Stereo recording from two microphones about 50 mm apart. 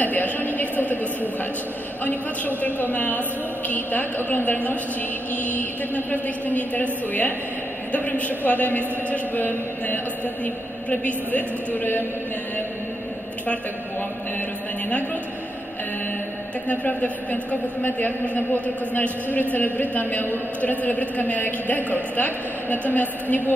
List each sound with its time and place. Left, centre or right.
0.0 s a sound: left
2.0 s a woman's voice: left
16.6 s a woman's voice: left